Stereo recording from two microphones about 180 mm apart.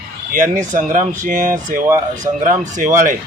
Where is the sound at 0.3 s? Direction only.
45° right (ahead or behind).